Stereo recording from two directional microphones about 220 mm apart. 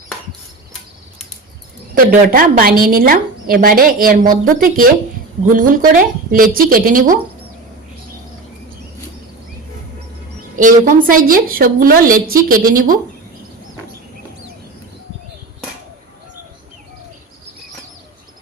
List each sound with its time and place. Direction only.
2.0 s a woman's voice: 40° right (ahead or behind)
10.6 s a woman's voice: 35° right (ahead or behind)